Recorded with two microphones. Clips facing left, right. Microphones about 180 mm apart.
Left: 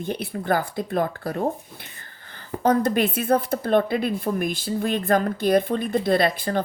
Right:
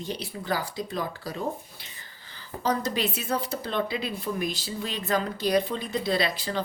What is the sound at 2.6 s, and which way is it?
Speech, 55° left (ahead or behind).